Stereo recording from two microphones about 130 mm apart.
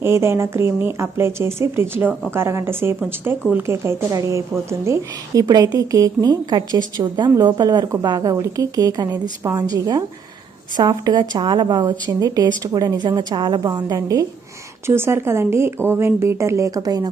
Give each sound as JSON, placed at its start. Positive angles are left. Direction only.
{"t": 0.0, "sound": "a woman's voice", "side_deg": -20}